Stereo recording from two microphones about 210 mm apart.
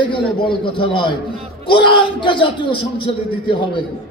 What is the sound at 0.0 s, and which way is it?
A man's voice, 25° left (ahead or behind).